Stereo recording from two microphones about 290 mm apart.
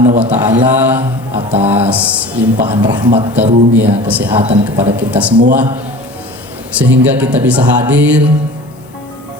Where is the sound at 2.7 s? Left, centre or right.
Centre.